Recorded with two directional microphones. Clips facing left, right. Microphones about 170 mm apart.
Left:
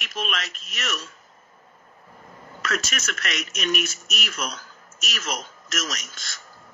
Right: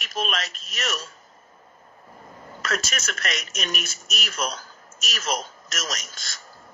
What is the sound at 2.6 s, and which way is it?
A man's voice, 35° right (ahead or behind).